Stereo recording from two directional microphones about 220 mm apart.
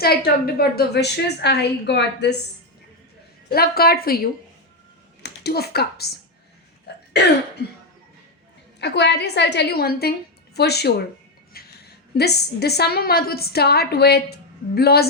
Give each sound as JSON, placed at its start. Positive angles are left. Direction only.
{"t": 0.0, "sound": "a woman's voice", "side_deg": 45}
{"t": 3.5, "sound": "a woman's voice", "side_deg": 45}
{"t": 6.9, "sound": "throat clearing", "side_deg": 50}
{"t": 8.8, "sound": "a woman's voice", "side_deg": 50}